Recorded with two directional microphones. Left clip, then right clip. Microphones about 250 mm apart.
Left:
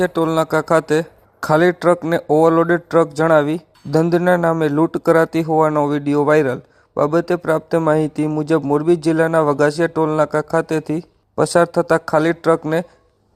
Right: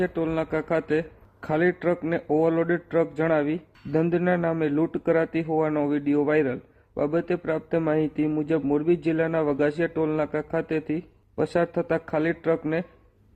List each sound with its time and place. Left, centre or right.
0.0 s speech: centre